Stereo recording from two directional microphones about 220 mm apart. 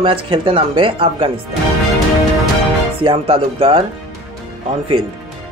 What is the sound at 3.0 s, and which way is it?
Speech, 25° right (ahead or behind).